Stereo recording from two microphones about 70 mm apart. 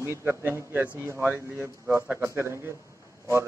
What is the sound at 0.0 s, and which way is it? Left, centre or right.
A man's voice, right.